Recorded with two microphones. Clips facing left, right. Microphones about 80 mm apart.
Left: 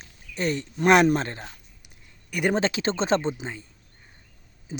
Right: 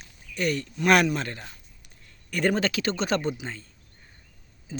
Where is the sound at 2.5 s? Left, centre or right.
Left.